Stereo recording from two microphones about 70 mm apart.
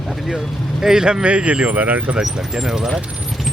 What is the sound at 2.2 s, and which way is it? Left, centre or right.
Speech, centre.